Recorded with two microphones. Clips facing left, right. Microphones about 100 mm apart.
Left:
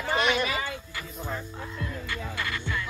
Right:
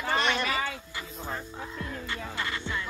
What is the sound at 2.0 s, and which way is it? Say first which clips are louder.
Music: even; 25° right (ahead or behind).